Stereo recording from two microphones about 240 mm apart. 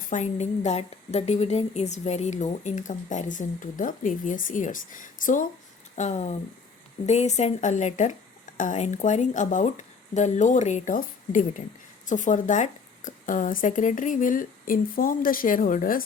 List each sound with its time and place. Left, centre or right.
0.1 s a woman's voice: left